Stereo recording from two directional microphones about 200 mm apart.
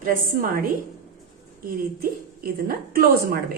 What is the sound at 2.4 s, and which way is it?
A woman's voice, 45° right (ahead or behind).